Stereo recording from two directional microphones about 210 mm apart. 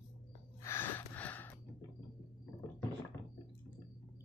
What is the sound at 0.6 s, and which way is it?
Gasp, 10° left (ahead or behind).